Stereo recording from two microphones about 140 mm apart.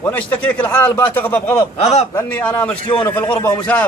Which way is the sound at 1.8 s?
50° left (ahead or behind).